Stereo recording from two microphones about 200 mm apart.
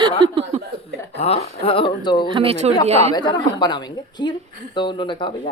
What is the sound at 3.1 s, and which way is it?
Speech, 20° left (ahead or behind).